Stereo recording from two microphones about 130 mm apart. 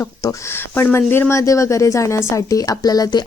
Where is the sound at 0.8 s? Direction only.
20° left (ahead or behind).